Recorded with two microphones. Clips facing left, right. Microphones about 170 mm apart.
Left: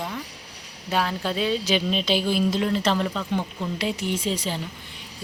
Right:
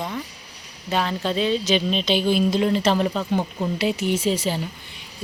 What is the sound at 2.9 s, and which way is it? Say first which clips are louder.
Speech: right 4 dB; 20° right (ahead or behind).